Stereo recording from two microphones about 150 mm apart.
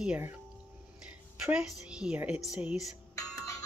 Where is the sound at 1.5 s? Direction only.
5° right (ahead or behind).